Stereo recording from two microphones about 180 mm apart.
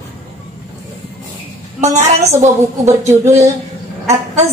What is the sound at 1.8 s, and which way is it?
A woman's voice, 40° right (ahead or behind).